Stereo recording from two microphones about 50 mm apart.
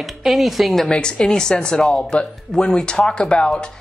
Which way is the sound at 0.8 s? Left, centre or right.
Centre.